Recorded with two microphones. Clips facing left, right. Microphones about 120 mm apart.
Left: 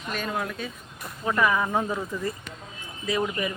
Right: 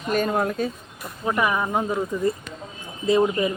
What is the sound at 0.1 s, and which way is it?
Speech, 45° right (ahead or behind).